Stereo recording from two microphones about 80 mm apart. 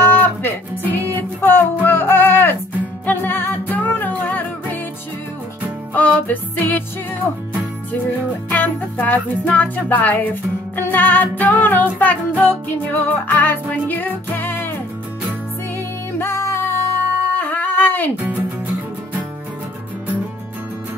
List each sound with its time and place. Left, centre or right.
0.0 s music: left
5.9 s music: left
8.5 s music: left
16.2 s music: left